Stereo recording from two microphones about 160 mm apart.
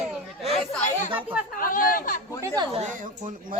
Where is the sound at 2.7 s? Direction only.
45° right (ahead or behind).